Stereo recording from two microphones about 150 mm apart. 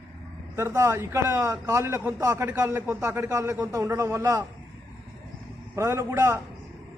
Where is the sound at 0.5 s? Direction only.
20° right (ahead or behind).